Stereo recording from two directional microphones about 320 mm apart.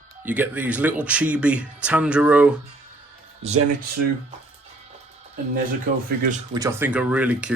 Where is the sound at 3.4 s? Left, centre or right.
Centre.